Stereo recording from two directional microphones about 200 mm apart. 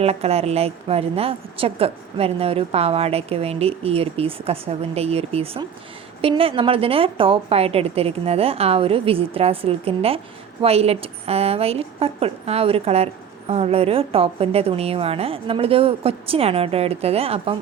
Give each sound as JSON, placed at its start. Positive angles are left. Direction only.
{"t": 0.0, "sound": "a woman's voice", "side_deg": -30}